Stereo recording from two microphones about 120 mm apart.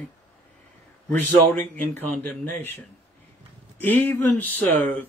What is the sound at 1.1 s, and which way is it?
Speech, 15° left (ahead or behind).